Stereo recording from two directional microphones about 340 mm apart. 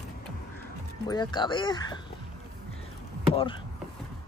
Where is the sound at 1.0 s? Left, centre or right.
Centre.